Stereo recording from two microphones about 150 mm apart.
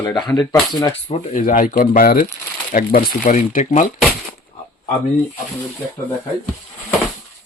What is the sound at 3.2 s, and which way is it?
Speech, 55° left (ahead or behind).